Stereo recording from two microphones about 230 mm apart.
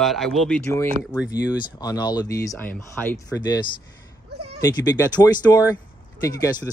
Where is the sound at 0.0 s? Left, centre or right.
Centre.